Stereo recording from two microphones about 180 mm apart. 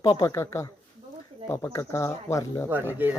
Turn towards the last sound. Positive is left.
turn(degrees=-10)  # may be behind; listen again after turning